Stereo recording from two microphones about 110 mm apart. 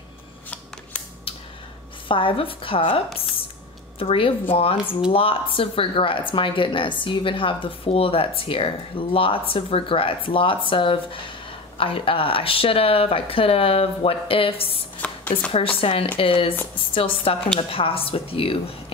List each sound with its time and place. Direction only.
2.0 s speech: 50° left (ahead or behind)
4.0 s speech: 60° left (ahead or behind)
15.0 s a sound: 10° left (ahead or behind)
15.8 s speech: 55° left (ahead or behind)